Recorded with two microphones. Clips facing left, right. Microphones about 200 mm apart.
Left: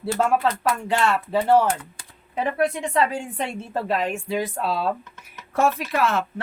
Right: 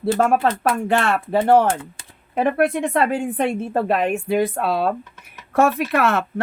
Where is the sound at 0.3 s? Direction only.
55° right (ahead or behind).